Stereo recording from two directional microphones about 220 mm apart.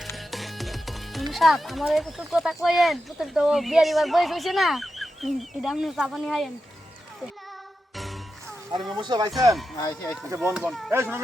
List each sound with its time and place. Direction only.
0.2 s speech: centre (ahead or behind)
7.9 s music: centre (ahead or behind)
9.0 s speech: 20° right (ahead or behind)
9.7 s speech: 15° left (ahead or behind)
10.2 s speech: 10° right (ahead or behind)